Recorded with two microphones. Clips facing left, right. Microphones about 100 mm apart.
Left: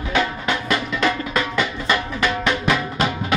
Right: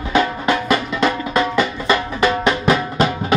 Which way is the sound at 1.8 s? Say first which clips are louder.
Right 4 dB; 35° right (ahead or behind).